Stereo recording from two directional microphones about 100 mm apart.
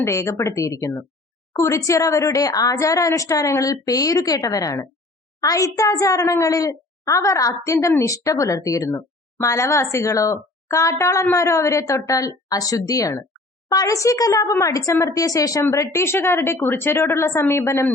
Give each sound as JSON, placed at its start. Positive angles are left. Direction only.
{"t": 0.0, "sound": "a child's voice", "side_deg": 30}